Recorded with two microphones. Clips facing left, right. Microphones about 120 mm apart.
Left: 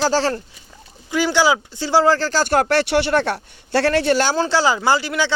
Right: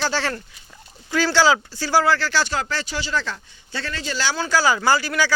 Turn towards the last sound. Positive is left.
turn(degrees=20)  # may be behind; listen again after turning